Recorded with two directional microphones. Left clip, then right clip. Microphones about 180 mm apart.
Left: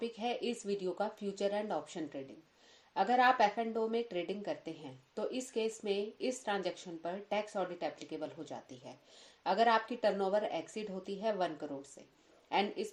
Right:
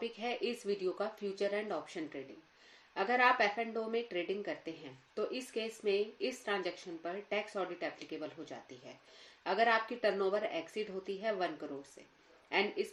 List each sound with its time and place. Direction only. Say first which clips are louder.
0.0 s speech: left 1 dB; 45° left (ahead or behind)